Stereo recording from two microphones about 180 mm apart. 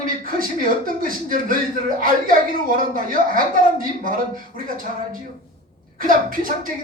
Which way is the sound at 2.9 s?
50° right (ahead or behind).